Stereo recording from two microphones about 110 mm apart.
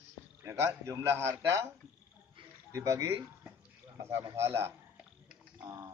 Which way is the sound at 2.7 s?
25° right (ahead or behind).